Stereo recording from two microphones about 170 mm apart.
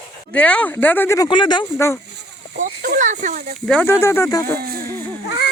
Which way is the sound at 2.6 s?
55° right (ahead or behind).